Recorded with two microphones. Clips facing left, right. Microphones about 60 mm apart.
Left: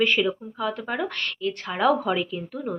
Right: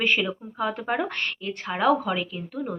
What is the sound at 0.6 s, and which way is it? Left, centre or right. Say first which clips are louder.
A woman's voice: right 4 dB; right.